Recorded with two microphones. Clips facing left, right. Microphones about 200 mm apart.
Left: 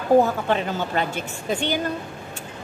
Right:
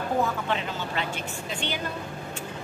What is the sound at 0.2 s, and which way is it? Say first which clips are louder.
Speech: left 6 dB; 45° left (ahead or behind).